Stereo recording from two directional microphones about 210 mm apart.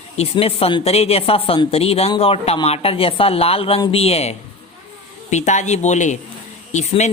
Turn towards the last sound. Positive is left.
turn(degrees=35)  # may be behind; listen again after turning